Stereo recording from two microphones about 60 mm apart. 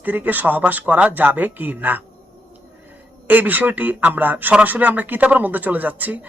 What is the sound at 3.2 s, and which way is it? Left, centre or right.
Speech, right.